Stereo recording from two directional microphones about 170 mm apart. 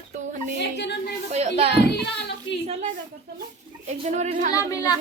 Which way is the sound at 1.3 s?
40° right (ahead or behind).